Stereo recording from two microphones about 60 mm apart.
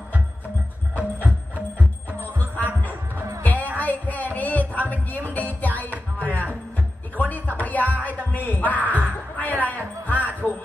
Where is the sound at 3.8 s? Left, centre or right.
Left.